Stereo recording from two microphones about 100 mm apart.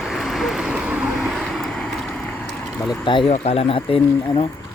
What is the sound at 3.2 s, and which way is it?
Speech, 85° left.